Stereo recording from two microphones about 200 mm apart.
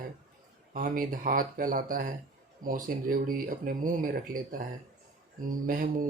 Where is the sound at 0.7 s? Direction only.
45° right (ahead or behind).